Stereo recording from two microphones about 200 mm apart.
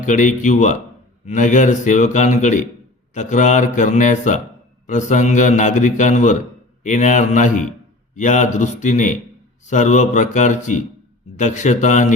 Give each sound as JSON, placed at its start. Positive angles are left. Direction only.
{"t": 0.0, "sound": "a man's voice", "side_deg": 40}